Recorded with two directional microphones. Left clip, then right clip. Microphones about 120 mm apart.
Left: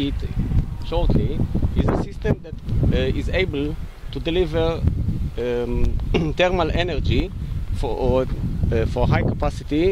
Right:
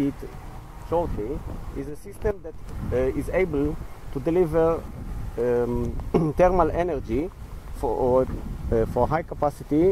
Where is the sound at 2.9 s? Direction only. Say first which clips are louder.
Even; 30° left (ahead or behind).